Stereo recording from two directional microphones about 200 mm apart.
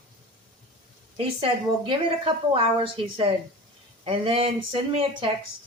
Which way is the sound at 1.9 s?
25° right (ahead or behind).